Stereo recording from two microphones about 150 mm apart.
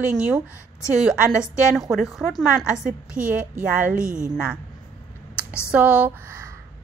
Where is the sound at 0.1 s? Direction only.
10° right (ahead or behind).